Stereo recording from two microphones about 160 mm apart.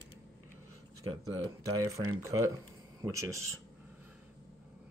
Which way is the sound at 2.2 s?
15° right (ahead or behind).